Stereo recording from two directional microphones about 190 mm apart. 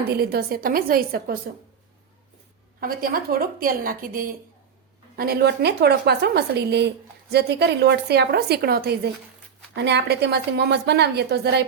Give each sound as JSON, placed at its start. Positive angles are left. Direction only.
{"t": 0.1, "sound": "a woman's voice", "side_deg": -55}
{"t": 2.8, "sound": "a woman's voice", "side_deg": -50}
{"t": 9.7, "sound": "a woman's voice", "side_deg": -65}